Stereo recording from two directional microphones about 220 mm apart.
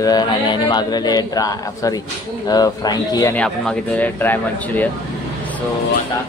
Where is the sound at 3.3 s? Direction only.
5° left (ahead or behind).